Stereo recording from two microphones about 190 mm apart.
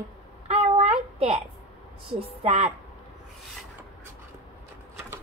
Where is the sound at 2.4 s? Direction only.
30° right (ahead or behind).